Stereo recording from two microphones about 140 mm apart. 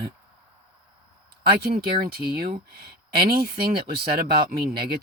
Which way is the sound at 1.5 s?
90° right.